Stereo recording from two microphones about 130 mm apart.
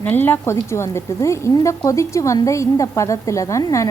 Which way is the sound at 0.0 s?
15° left (ahead or behind).